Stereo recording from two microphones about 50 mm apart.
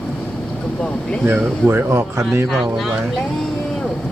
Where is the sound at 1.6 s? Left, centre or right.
Right.